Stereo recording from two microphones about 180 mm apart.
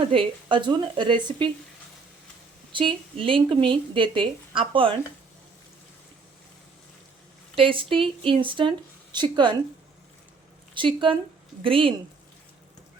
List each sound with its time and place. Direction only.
0.1 s speech: 30° right (ahead or behind)
2.7 s speech: 30° right (ahead or behind)
7.5 s speech: 30° right (ahead or behind)
10.8 s speech: 30° right (ahead or behind)